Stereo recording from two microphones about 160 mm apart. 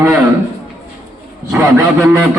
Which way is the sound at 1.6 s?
20° right (ahead or behind).